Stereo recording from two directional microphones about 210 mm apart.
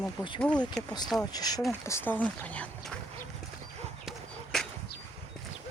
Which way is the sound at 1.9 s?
10° left (ahead or behind).